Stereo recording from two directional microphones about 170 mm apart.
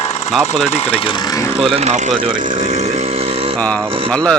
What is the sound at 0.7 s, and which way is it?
Speech, 35° left (ahead or behind).